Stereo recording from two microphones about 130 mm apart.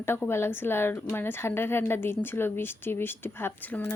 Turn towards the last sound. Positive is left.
turn(degrees=15)  # may be behind; listen again after turning